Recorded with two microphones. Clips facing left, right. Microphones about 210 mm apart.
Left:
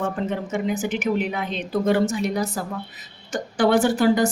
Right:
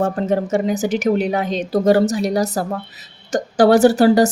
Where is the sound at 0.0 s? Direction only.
45° right (ahead or behind).